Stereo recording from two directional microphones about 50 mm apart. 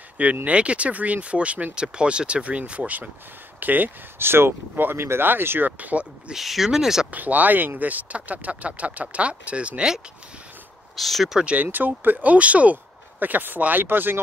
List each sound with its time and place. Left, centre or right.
0.5 s speech: right
3.5 s speech: right
4.2 s speech: right
5.8 s speech: right
6.3 s speech: centre
7.1 s speech: right
11.0 s speech: centre
11.6 s speech: right
13.2 s speech: right